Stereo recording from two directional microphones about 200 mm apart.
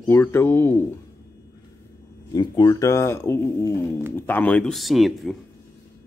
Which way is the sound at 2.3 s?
20° left (ahead or behind).